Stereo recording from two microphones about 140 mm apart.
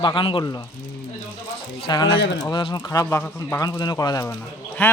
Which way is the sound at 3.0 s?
15° left (ahead or behind).